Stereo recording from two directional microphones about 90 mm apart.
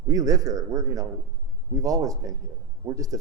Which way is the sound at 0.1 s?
40° right (ahead or behind).